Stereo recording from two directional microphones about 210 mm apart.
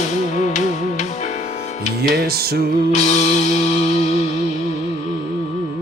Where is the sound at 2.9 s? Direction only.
35° left (ahead or behind).